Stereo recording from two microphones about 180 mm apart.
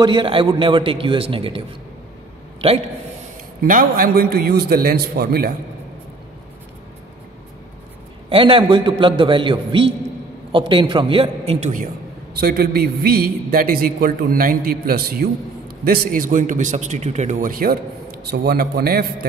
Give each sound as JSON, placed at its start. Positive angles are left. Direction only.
{"t": 0.0, "sound": "a man's voice", "side_deg": -25}
{"t": 3.6, "sound": "a man's voice", "side_deg": -50}
{"t": 8.3, "sound": "a man's voice", "side_deg": -30}
{"t": 12.4, "sound": "a man's voice", "side_deg": -60}